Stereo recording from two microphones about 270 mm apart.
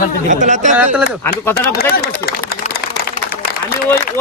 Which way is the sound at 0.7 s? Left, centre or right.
Centre.